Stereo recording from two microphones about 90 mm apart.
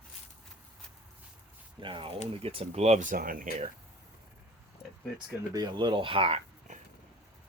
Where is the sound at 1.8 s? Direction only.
65° right (ahead or behind); by 2.6 s 85° right.